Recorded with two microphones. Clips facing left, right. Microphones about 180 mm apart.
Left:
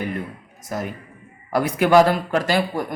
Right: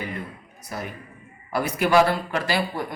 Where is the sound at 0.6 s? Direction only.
50° left (ahead or behind).